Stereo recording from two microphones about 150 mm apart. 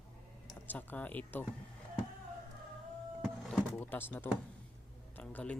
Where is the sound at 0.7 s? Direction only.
10° left (ahead or behind).